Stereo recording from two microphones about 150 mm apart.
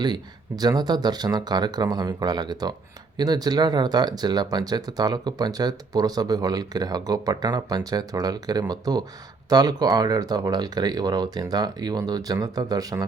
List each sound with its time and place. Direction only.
0.0 s speech: 25° right (ahead or behind)